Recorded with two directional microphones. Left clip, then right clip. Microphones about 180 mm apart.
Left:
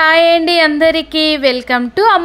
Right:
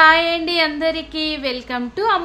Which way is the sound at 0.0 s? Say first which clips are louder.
Left 4 dB; 45° left (ahead or behind).